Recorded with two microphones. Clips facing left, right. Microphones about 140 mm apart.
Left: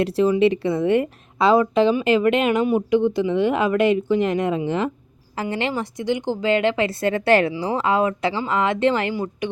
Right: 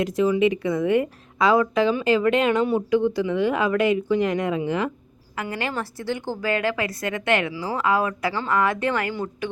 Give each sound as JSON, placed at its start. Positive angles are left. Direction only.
{"t": 0.0, "sound": "a woman's voice", "side_deg": 30}